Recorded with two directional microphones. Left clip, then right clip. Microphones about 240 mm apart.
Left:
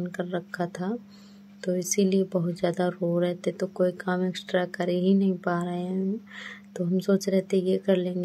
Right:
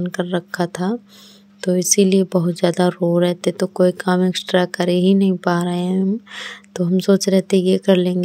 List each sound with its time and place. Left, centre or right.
0.0 s speech: right